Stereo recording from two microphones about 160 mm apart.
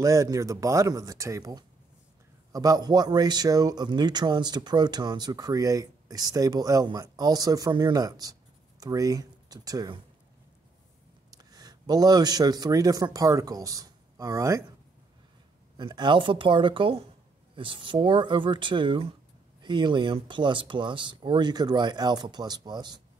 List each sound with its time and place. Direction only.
0.0 s speech: 20° right (ahead or behind)
11.2 s speech: 25° right (ahead or behind)
15.8 s speech: 30° right (ahead or behind)